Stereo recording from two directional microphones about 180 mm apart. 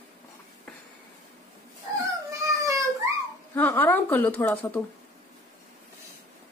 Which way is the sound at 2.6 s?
20° right (ahead or behind).